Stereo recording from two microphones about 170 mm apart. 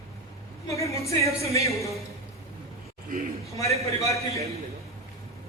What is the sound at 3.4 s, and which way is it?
Speech, 20° left (ahead or behind).